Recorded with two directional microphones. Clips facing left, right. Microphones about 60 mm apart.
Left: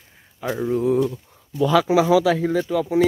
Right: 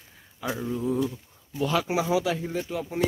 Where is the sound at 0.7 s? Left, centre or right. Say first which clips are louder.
Left 9 dB; left.